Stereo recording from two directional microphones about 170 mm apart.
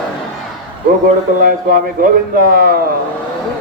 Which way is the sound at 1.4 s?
55° right (ahead or behind).